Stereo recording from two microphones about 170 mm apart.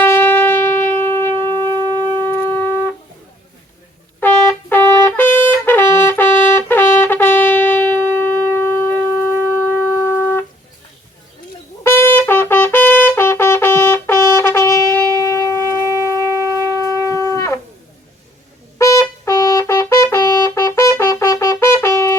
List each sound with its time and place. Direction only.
0.0 s shofar: 10° left (ahead or behind)
1.9 s shofar: 25° right (ahead or behind)
4.2 s trumpet: 10° left (ahead or behind)
11.8 s trumpet: 15° left (ahead or behind)
14.3 s shofar: 15° left (ahead or behind)
18.8 s trumpet: 15° left (ahead or behind)